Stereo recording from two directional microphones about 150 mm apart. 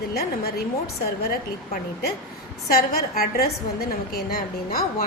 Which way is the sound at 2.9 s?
90° left.